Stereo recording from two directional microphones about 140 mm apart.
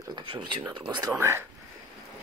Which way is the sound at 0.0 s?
35° right (ahead or behind).